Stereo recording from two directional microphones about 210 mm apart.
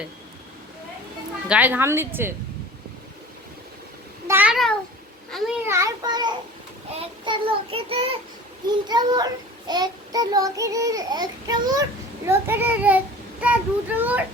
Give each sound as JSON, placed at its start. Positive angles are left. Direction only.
{"t": 1.5, "sound": "child singing", "side_deg": -5}
{"t": 4.3, "sound": "a sound", "side_deg": -5}
{"t": 5.3, "sound": "a child's voice", "side_deg": 0}
{"t": 5.6, "sound": "child singing", "side_deg": -15}